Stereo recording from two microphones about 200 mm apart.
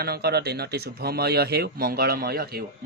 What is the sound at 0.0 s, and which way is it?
Speech, 50° right (ahead or behind).